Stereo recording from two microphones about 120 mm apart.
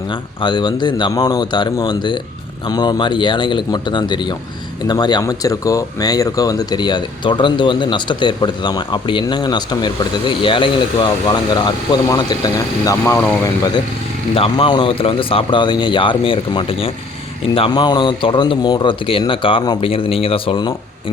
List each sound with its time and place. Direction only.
0.1 s speech: 40° left (ahead or behind)
14.3 s speech: 50° left (ahead or behind)